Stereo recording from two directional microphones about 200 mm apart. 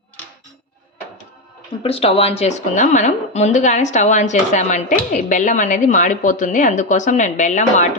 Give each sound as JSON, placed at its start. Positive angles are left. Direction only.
{"t": 1.8, "sound": "speech", "side_deg": 30}